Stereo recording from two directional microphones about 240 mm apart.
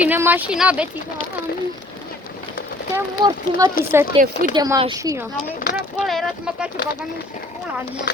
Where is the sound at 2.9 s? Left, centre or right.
Centre.